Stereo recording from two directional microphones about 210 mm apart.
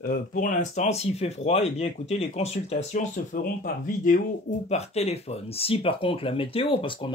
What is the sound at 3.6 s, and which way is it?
Speech, 40° left (ahead or behind).